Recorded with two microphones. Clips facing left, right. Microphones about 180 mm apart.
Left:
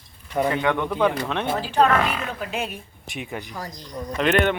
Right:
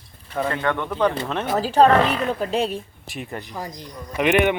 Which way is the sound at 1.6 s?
35° right (ahead or behind).